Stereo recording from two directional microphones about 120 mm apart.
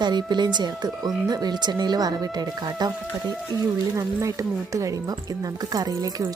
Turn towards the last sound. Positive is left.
turn(degrees=-30)  # may be behind; listen again after turning